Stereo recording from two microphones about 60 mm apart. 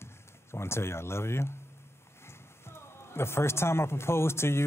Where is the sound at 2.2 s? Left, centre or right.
Left.